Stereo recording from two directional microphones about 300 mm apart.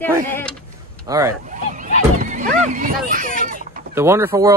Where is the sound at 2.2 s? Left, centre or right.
Right.